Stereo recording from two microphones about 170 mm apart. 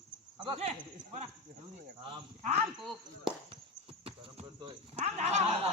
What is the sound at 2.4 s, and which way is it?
Speech, 40° right (ahead or behind).